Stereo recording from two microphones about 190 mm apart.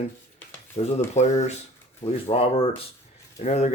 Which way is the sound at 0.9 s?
35° left (ahead or behind).